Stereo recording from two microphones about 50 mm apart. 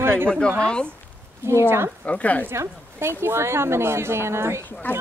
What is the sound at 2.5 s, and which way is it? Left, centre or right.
A woman's voice, right.